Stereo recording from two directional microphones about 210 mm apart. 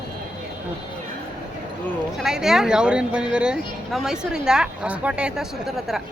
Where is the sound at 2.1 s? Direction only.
Centre (ahead or behind).